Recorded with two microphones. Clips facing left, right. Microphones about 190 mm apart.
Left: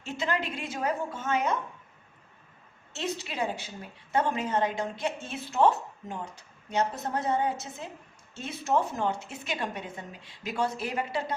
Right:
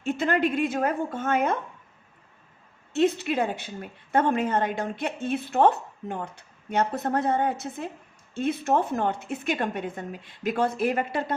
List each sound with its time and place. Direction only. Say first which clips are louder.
0.0 s a woman's voice: right 7 dB; 55° right (ahead or behind)
2.9 s a woman's voice: right 11 dB; 55° right (ahead or behind)